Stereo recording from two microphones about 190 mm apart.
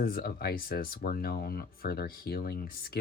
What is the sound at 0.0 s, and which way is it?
Speech, 55° left (ahead or behind).